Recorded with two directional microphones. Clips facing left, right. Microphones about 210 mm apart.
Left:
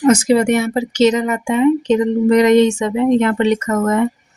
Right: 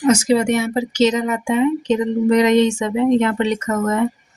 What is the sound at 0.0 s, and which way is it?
A woman's voice, 55° left (ahead or behind).